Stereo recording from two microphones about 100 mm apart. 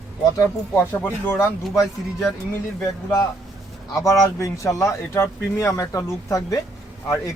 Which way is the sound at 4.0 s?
35° left (ahead or behind).